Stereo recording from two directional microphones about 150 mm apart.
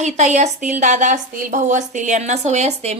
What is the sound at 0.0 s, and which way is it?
A woman's voice, 50° right (ahead or behind).